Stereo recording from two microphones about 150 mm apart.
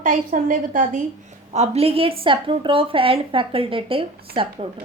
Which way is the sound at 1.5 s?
45° right (ahead or behind).